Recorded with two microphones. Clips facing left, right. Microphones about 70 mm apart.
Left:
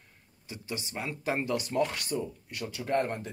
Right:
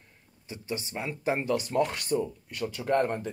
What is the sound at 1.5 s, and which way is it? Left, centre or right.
Speech, right.